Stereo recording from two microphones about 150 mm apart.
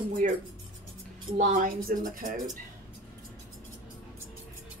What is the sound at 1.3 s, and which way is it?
Speech, 60° right (ahead or behind).